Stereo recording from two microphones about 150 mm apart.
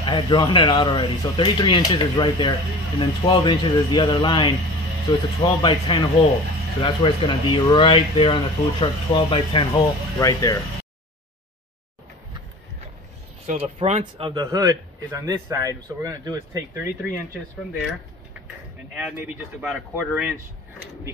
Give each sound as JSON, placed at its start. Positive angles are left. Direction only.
{"t": 0.0, "sound": "speech", "side_deg": 30}
{"t": 10.1, "sound": "speech", "side_deg": 25}
{"t": 13.5, "sound": "speech", "side_deg": -45}
{"t": 14.3, "sound": "a man's voice", "side_deg": -25}
{"t": 18.9, "sound": "speech", "side_deg": -5}